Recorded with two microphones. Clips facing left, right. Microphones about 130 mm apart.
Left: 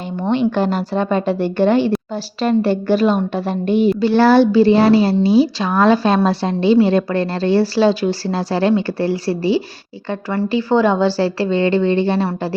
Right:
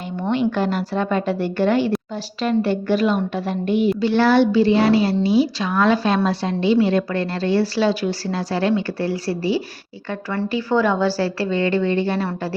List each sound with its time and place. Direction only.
0.3 s a woman's voice: 25° left (ahead or behind)